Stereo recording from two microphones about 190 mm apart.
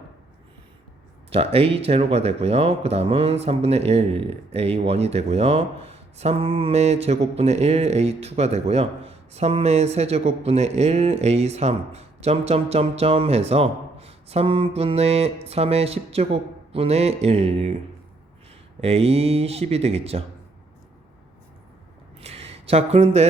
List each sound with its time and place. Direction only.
1.3 s speech: 30° right (ahead or behind)
18.8 s speech: 35° right (ahead or behind)
22.2 s speech: 35° right (ahead or behind)